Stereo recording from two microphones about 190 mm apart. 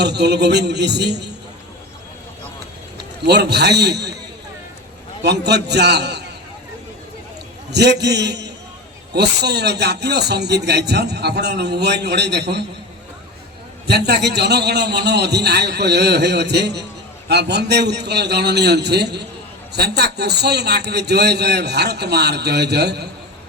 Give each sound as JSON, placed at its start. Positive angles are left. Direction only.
{"t": 0.0, "sound": "speech", "side_deg": -60}
{"t": 3.2, "sound": "speech", "side_deg": -60}
{"t": 5.2, "sound": "speech", "side_deg": -60}
{"t": 7.7, "sound": "speech", "side_deg": -60}
{"t": 13.8, "sound": "speech", "side_deg": -60}